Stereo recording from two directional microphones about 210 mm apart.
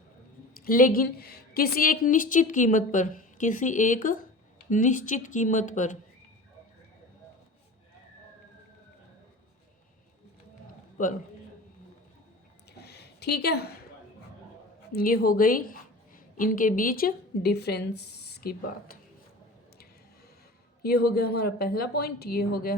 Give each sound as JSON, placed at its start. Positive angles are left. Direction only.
{"t": 0.5, "sound": "a woman's voice", "side_deg": 45}
{"t": 11.0, "sound": "a woman's voice", "side_deg": 40}
{"t": 12.7, "sound": "a sound", "side_deg": 50}
{"t": 14.9, "sound": "a woman's voice", "side_deg": 45}
{"t": 20.8, "sound": "a woman's voice", "side_deg": 45}